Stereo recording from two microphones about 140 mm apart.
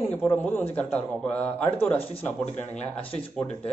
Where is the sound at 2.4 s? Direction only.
55° left (ahead or behind).